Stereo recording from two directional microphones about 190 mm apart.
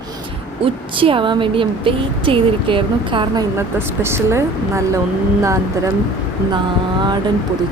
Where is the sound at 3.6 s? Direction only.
15° right (ahead or behind).